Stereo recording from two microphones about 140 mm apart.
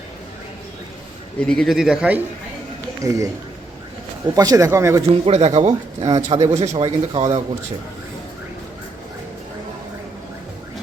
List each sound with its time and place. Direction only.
1.5 s a man's voice: centre (ahead or behind)
3.0 s speech: 20° right (ahead or behind)
4.4 s speech: 25° right (ahead or behind)
5.2 s a man's voice: 45° right (ahead or behind)